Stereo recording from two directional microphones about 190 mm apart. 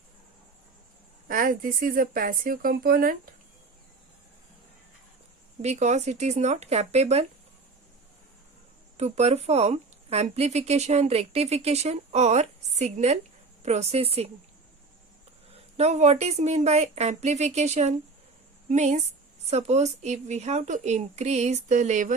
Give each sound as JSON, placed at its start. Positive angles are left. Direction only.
{"t": 1.3, "sound": "speech", "side_deg": -45}
{"t": 5.6, "sound": "speech", "side_deg": -35}
{"t": 9.0, "sound": "speech", "side_deg": -35}
{"t": 15.5, "sound": "speech", "side_deg": -35}